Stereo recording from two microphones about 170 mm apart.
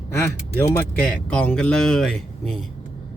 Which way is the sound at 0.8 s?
10° left (ahead or behind).